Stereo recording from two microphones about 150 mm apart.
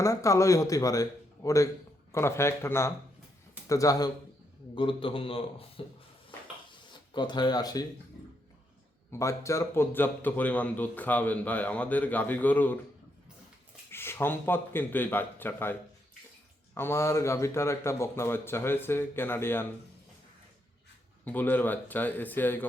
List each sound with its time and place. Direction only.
0.0 s a man's voice: 20° left (ahead or behind)
4.7 s a man's voice: 35° left (ahead or behind)
7.1 s speech: 30° left (ahead or behind)
9.1 s a man's voice: 20° left (ahead or behind)
13.9 s a man's voice: 15° left (ahead or behind)
16.7 s a man's voice: 15° left (ahead or behind)
21.2 s a man's voice: 10° left (ahead or behind)